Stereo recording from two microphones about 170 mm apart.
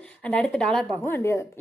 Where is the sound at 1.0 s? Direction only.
15° left (ahead or behind).